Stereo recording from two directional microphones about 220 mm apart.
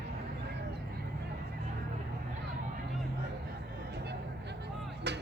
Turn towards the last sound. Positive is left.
turn(degrees=-50)  # may be behind; listen again after turning